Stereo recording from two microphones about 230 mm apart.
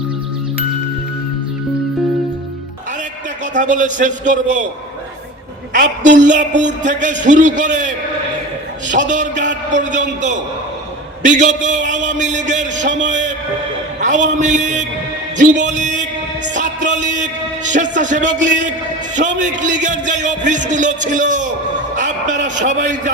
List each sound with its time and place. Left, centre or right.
3.5 s music: right
5.7 s music: right
14.0 s a man's voice: right
14.3 s music: right
21.9 s a man's voice: right